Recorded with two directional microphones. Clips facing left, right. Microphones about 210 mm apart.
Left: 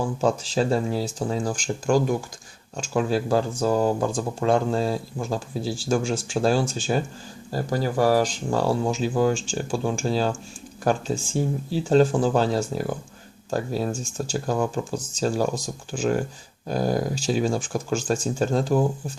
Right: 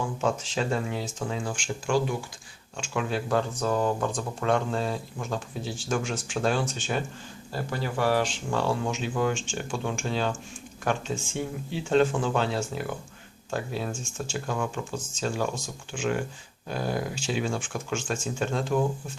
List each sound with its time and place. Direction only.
0.0 s speech: 35° left (ahead or behind)